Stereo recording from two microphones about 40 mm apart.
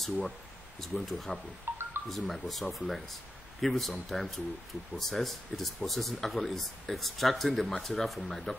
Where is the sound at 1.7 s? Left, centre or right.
Right.